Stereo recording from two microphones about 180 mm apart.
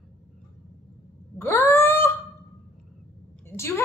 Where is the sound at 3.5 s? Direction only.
15° left (ahead or behind).